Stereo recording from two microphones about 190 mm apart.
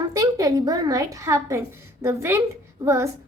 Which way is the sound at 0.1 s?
20° right (ahead or behind).